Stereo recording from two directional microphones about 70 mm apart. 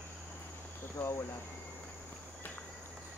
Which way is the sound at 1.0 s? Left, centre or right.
Left.